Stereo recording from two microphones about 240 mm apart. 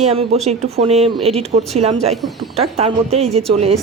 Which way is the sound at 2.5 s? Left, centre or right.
Right.